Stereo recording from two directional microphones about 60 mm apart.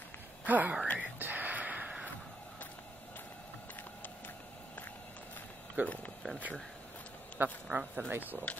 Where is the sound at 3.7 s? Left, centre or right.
Left.